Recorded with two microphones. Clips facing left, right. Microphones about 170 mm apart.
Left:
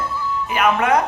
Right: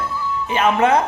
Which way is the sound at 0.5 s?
25° right (ahead or behind).